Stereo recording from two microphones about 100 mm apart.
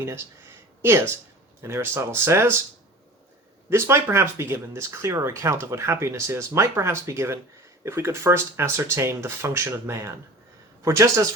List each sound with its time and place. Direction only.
0.8 s speech: 25° right (ahead or behind)
3.7 s speech: 25° right (ahead or behind)